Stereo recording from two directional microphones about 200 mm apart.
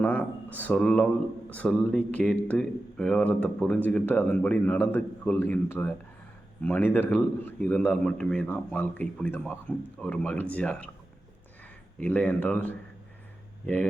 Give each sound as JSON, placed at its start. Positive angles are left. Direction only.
{"t": 0.0, "sound": "a man's voice", "side_deg": 5}
{"t": 11.9, "sound": "a man's voice", "side_deg": 5}